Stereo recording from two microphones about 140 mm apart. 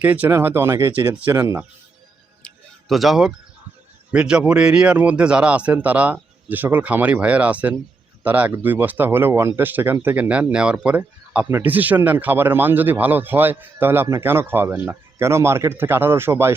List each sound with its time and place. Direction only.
0.0 s speech: 10° right (ahead or behind)
1.1 s speech: 10° right (ahead or behind)
2.9 s speech: centre (ahead or behind); by 16.6 s 15° right (ahead or behind)